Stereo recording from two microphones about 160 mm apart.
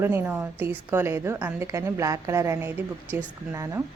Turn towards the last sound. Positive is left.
turn(degrees=-15)  # may be behind; listen again after turning